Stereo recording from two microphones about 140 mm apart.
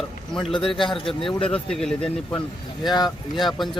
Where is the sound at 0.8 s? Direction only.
40° left (ahead or behind).